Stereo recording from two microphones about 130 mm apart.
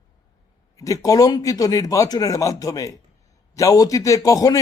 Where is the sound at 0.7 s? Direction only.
25° left (ahead or behind).